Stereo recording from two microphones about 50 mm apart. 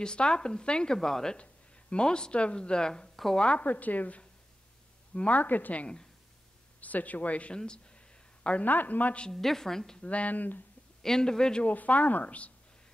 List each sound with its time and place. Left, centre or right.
0.0 s a woman's voice: centre
7.5 s speech: centre
8.5 s a woman's voice: left
9.3 s speech: centre
10.0 s a woman's voice: left
11.0 s speech: centre
11.6 s a woman's voice: left